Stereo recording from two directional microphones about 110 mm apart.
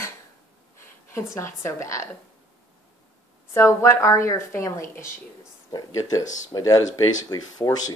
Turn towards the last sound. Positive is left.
turn(degrees=35)  # may be behind; listen again after turning